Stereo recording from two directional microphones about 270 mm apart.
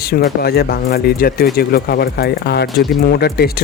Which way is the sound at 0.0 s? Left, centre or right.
Left.